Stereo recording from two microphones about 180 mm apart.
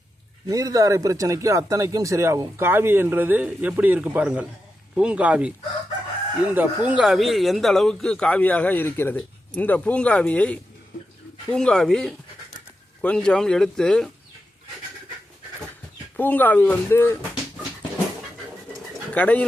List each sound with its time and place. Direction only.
0.4 s speech: 20° right (ahead or behind); by 14.1 s 5° left (ahead or behind)
16.1 s speech: 10° left (ahead or behind)
19.1 s speech: 5° left (ahead or behind)